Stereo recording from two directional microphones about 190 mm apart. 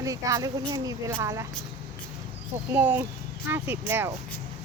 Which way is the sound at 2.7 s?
10° right (ahead or behind).